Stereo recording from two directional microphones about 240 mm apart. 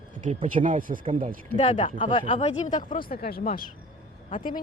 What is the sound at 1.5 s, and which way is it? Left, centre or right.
Speech, left.